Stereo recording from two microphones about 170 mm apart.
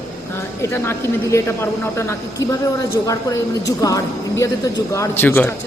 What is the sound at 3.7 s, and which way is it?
A woman's voice, 20° left (ahead or behind).